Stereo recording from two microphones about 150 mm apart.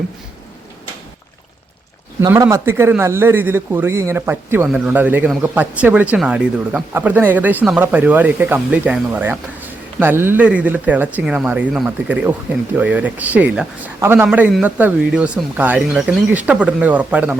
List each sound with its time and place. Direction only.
2.2 s speech: 20° right (ahead or behind)